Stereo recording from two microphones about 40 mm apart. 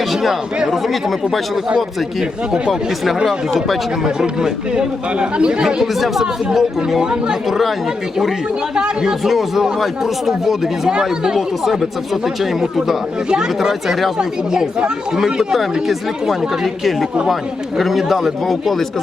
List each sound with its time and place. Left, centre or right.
0.1 s speech: centre
3.2 s speech: centre
4.0 s speech: centre
5.8 s speech: centre
7.0 s speech: right
7.4 s speech: centre
8.7 s speech: centre
9.2 s speech: centre
13.2 s speech: centre
14.2 s speech: centre
16.6 s speech: centre